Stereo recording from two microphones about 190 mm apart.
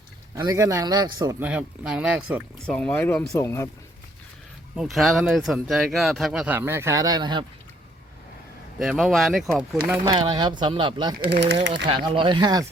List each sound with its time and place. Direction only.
0.3 s speech: 15° right (ahead or behind)
1.4 s speech: 5° right (ahead or behind)
2.6 s speech: 5° left (ahead or behind)
4.7 s speech: centre (ahead or behind); by 7.4 s 25° right (ahead or behind)
8.8 s speech: centre (ahead or behind)
10.0 s speech: 25° right (ahead or behind)
11.2 s speech: 60° right (ahead or behind)
11.9 s speech: 25° right (ahead or behind)